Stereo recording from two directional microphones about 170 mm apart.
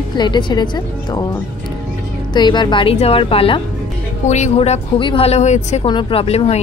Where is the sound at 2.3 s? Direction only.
25° left (ahead or behind); by 5.8 s 45° left (ahead or behind).